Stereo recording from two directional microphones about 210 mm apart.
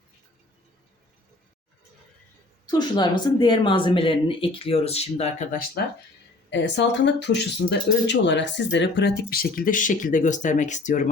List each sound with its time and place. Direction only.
2.6 s speech: 20° left (ahead or behind); by 5.8 s 40° left (ahead or behind)
6.5 s speech: 55° left (ahead or behind); by 11.1 s 35° left (ahead or behind)